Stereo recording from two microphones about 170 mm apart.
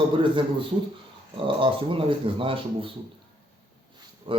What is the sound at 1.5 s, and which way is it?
Speech, 30° right (ahead or behind).